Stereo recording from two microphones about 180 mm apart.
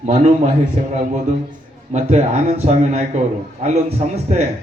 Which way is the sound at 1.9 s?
40° right (ahead or behind).